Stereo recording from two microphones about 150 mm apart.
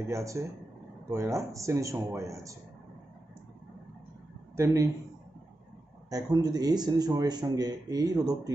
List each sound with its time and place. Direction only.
0.1 s speech: 20° right (ahead or behind)
4.6 s speech: 20° right (ahead or behind)
6.0 s speech: 25° right (ahead or behind)